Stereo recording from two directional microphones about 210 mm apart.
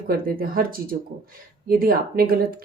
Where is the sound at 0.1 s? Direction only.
45° right (ahead or behind).